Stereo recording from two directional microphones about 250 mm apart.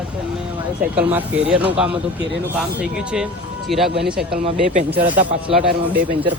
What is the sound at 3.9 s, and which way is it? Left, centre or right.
Speech, right.